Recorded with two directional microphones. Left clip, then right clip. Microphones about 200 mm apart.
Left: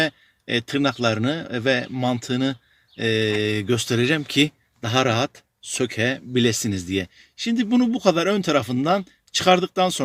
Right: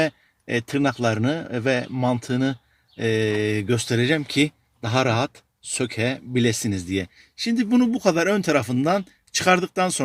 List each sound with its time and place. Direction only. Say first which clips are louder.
0.0 s a man's voice: even; 15° left (ahead or behind)
7.0 s speech: even; 90° left
7.5 s a man's voice: even; 10° left (ahead or behind)